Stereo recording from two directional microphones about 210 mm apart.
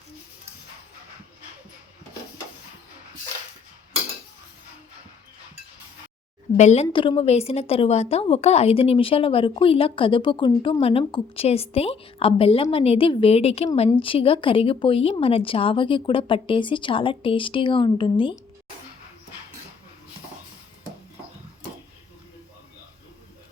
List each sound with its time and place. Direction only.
6.6 s a woman's voice: 30° left (ahead or behind)